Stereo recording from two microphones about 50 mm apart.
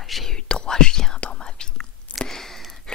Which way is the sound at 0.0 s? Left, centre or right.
Centre.